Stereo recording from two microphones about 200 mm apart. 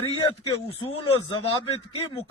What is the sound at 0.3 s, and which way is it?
Speech, 25° left (ahead or behind).